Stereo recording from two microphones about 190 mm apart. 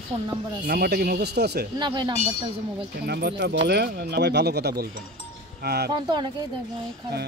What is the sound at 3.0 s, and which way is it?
Speech, 60° right (ahead or behind).